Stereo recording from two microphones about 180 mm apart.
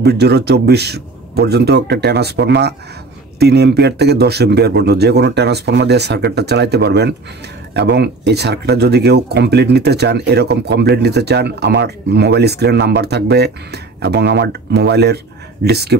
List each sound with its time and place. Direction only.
0.0 s speech: 65° right (ahead or behind)